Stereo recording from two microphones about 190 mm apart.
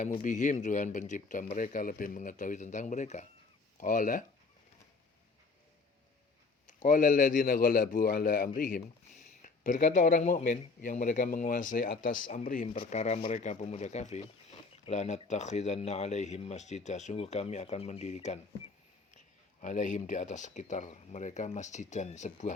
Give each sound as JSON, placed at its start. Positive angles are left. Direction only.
{"t": 0.2, "sound": "a man's voice", "side_deg": 40}
{"t": 6.7, "sound": "a man's voice", "side_deg": 45}
{"t": 12.6, "sound": "speech", "side_deg": 30}
{"t": 19.6, "sound": "speech", "side_deg": 40}